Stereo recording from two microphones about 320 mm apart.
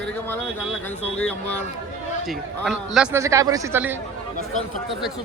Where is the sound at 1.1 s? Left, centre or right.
Centre.